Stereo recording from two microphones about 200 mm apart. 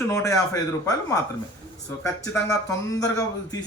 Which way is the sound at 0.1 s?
15° left (ahead or behind).